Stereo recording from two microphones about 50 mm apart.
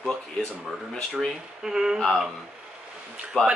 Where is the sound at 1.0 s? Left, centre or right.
Centre.